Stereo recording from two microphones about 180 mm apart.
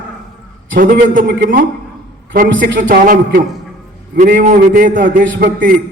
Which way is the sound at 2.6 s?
45° right (ahead or behind).